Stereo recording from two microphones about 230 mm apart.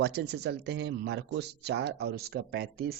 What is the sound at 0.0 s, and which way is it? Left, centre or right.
A man's voice, right.